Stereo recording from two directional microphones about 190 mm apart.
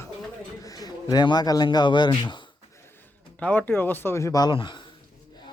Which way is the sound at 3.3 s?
10° left (ahead or behind).